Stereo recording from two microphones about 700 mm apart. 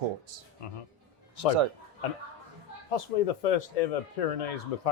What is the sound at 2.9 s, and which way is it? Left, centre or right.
Speech, left.